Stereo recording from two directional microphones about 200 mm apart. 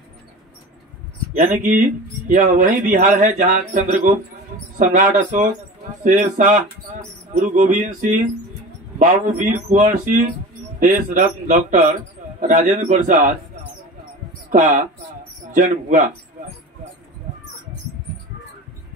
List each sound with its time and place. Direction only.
1.3 s speech: 40° right (ahead or behind)
10.8 s speech: 40° right (ahead or behind)
14.5 s speech: 40° right (ahead or behind)